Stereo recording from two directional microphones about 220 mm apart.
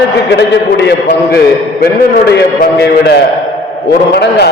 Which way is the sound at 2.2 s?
50° left (ahead or behind).